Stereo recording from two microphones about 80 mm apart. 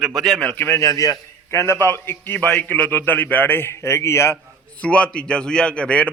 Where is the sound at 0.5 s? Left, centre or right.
Left.